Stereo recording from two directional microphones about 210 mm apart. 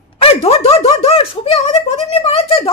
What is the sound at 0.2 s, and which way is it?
Speech, 30° left (ahead or behind).